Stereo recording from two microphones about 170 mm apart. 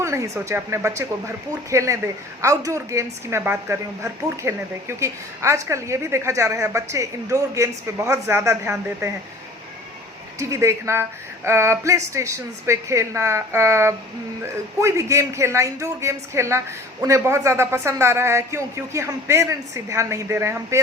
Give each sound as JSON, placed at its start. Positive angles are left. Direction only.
{"t": 0.0, "sound": "speech", "side_deg": -15}
{"t": 10.3, "sound": "speech", "side_deg": -20}